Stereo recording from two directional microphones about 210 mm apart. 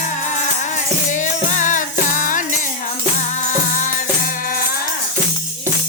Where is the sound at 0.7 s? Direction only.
35° left (ahead or behind).